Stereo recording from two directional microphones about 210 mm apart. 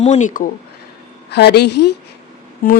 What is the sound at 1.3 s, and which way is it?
Speech, 50° left (ahead or behind).